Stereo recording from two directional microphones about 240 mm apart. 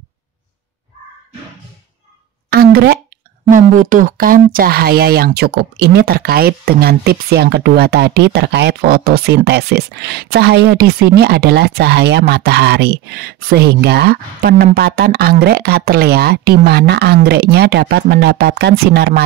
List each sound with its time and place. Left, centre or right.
2.5 s speech: right